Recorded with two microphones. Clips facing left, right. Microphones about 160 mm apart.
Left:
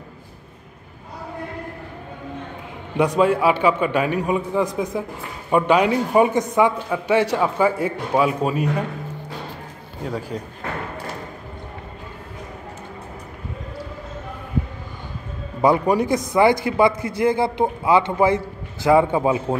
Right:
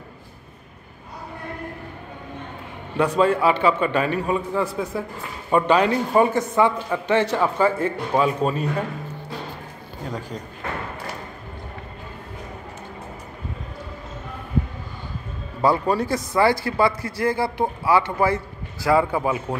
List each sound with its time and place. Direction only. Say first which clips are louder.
3.0 s a man's voice: left 1 dB; 10° left (ahead or behind)
10.0 s a man's voice: left 4 dB; 5° left (ahead or behind)
15.6 s a man's voice: left 3 dB; 15° left (ahead or behind)